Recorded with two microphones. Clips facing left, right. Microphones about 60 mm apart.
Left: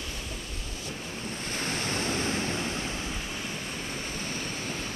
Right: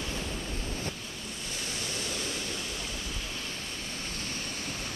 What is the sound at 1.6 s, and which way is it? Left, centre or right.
Waves, left.